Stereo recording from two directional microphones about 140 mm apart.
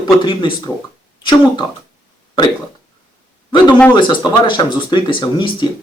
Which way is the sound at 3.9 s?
35° left (ahead or behind).